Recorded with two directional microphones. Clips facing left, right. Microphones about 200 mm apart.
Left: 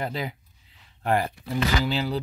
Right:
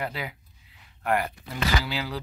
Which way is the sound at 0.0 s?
30° left (ahead or behind).